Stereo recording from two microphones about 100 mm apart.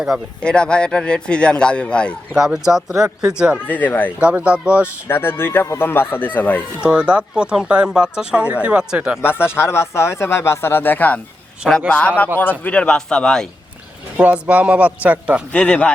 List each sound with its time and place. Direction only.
0.1 s speech: 5° right (ahead or behind)
0.4 s a man's voice: 10° left (ahead or behind)
2.3 s speech: 5° right (ahead or behind)
3.7 s speech: 20° left (ahead or behind)
4.2 s speech: 10° right (ahead or behind)
5.0 s speech: 20° left (ahead or behind)
6.8 s speech: 10° right (ahead or behind)
9.2 s a man's voice: 25° left (ahead or behind); by 13.5 s 5° left (ahead or behind)
14.2 s speech: 15° right (ahead or behind)
15.5 s a man's voice: 10° left (ahead or behind)